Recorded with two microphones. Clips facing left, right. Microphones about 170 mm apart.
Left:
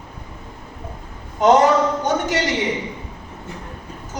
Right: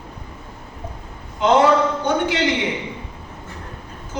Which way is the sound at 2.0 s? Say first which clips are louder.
Even; 45° left (ahead or behind).